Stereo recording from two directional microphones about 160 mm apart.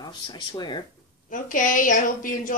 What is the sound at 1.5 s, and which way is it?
A woman's voice, 55° left (ahead or behind).